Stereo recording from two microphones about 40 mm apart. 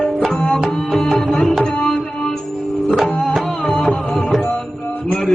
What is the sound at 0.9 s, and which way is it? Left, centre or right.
Tabla, centre.